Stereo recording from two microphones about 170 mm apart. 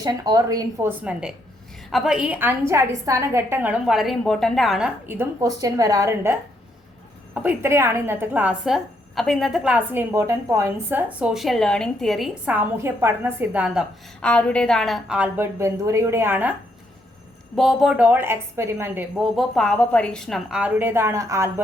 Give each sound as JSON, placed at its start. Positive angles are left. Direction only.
{"t": 0.0, "sound": "a woman's voice", "side_deg": -25}
{"t": 5.0, "sound": "a woman's voice", "side_deg": -15}
{"t": 7.3, "sound": "a woman's voice", "side_deg": -10}
{"t": 14.2, "sound": "a woman's voice", "side_deg": 5}
{"t": 17.5, "sound": "a woman's voice", "side_deg": 0}
{"t": 19.1, "sound": "a woman's voice", "side_deg": 0}